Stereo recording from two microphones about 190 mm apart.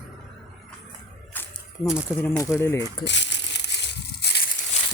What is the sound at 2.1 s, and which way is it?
Speech, 15° left (ahead or behind).